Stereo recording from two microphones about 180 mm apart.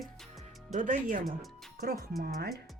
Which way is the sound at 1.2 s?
Centre (ahead or behind).